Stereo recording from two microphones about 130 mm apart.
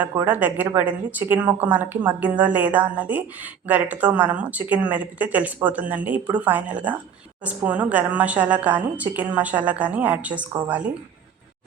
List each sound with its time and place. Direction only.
0.3 s a woman's voice: 10° right (ahead or behind)